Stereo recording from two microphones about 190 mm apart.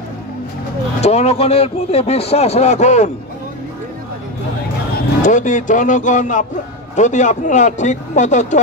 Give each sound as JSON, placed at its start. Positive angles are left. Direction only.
{"t": 1.0, "sound": "a man's voice", "side_deg": 35}
{"t": 5.2, "sound": "a man's voice", "side_deg": 40}